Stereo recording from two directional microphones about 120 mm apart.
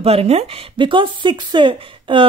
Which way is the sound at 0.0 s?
55° right (ahead or behind).